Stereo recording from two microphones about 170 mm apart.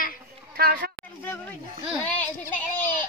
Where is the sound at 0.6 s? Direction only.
65° right (ahead or behind).